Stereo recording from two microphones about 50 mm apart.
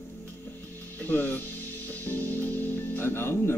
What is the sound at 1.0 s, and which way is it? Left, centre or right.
Speech, left.